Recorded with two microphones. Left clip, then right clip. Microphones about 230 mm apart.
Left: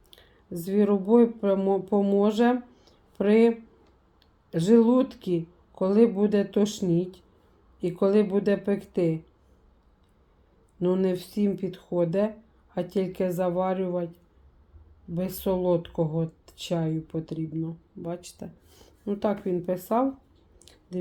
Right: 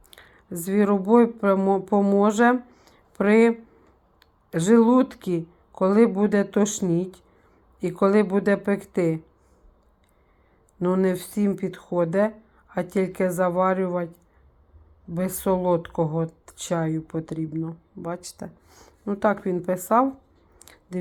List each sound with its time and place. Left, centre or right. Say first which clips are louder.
0.1 s a woman's voice: right 2 dB; centre
10.8 s speech: right 2 dB; centre